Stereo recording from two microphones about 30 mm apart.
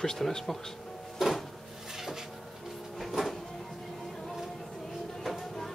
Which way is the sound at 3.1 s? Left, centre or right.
Centre.